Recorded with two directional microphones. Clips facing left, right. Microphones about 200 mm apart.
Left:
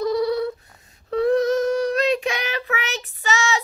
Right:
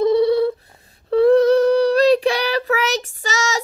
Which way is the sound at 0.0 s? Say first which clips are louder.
Right 6 dB; 25° right (ahead or behind).